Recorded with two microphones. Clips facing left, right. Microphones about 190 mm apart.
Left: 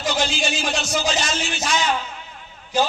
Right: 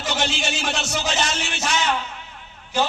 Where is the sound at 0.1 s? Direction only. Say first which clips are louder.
Right 1 dB; 65° right (ahead or behind).